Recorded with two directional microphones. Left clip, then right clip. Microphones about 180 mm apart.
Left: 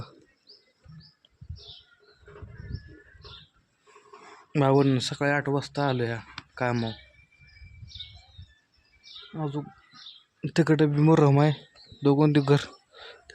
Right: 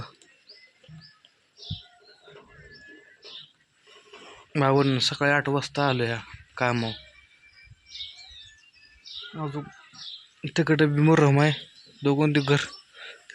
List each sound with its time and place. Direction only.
4.5 s speech: 15° left (ahead or behind)
9.4 s speech: 20° left (ahead or behind)
10.8 s a man's voice: 5° left (ahead or behind)
12.0 s a sound: 15° left (ahead or behind)